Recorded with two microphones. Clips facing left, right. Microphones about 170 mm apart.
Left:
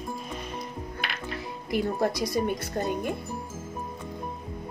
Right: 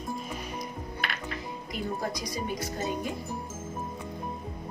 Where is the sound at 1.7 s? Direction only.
70° left (ahead or behind).